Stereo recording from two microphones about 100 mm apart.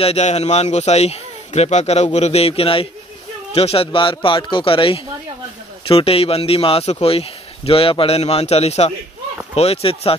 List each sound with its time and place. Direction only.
0.0 s a man's voice: 90° left; by 10.1 s 75° left (ahead or behind)